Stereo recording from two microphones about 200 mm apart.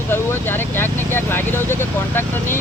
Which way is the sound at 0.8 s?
10° left (ahead or behind).